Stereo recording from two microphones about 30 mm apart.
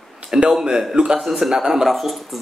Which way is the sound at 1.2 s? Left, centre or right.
Centre.